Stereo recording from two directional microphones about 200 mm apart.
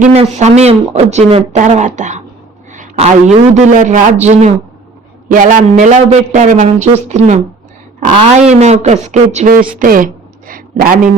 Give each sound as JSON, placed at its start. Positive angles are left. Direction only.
{"t": 0.0, "sound": "a man's voice", "side_deg": -35}